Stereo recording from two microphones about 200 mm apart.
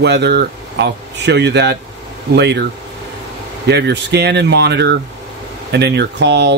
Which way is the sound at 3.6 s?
55° right (ahead or behind).